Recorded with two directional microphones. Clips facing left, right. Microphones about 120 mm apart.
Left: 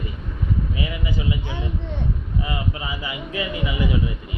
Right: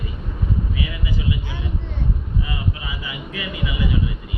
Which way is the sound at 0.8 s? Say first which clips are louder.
Left 1 dB; 25° left (ahead or behind).